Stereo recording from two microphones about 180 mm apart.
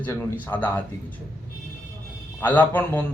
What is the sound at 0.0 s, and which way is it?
Speech, 10° left (ahead or behind).